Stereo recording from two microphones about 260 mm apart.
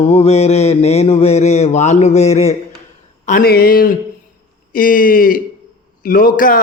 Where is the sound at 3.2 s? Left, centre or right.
Left.